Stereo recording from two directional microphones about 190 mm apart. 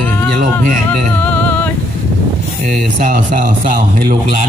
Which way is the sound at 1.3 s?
10° left (ahead or behind).